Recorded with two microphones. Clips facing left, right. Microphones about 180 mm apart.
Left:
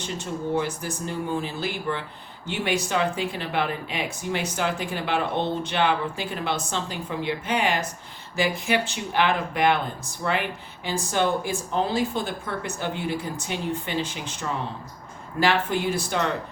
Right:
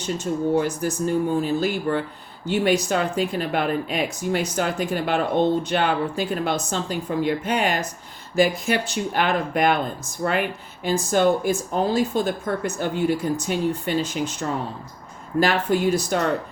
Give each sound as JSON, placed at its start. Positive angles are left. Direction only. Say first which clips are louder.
{"t": 0.5, "sound": "speech", "louder": "right 5 dB", "side_deg": -40}